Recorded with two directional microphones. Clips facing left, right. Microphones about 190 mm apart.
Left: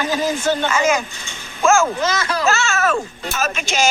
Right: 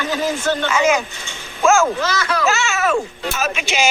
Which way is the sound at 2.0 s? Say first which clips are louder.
Even; 25° left (ahead or behind).